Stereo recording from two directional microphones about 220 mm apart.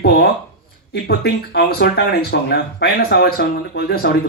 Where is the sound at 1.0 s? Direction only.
45° left (ahead or behind).